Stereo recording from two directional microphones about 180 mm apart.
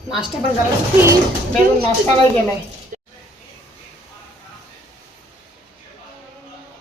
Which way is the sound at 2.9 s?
40° right (ahead or behind).